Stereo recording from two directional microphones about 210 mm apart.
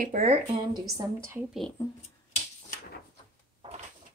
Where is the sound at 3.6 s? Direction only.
30° right (ahead or behind).